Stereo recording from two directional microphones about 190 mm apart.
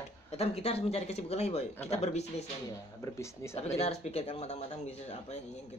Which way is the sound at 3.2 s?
15° left (ahead or behind).